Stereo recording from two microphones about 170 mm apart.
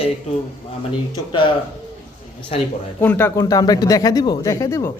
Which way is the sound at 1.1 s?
30° left (ahead or behind).